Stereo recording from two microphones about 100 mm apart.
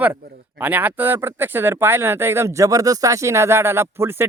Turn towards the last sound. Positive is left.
turn(degrees=-25)  # may be behind; listen again after turning